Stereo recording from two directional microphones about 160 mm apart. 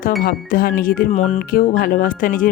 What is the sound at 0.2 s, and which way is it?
A woman's voice, 65° left (ahead or behind).